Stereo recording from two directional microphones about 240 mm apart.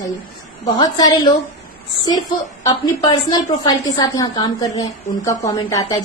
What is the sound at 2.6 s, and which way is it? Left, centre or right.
A woman's voice, centre.